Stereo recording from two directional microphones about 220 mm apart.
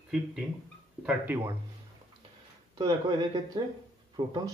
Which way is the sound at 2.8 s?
20° right (ahead or behind).